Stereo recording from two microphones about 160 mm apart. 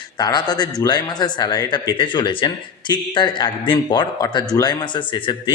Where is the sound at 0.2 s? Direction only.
25° left (ahead or behind).